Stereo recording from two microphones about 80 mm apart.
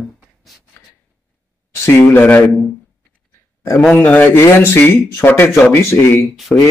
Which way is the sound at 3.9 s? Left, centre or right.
Centre.